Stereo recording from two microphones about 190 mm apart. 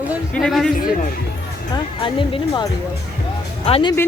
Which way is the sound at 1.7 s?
25° left (ahead or behind).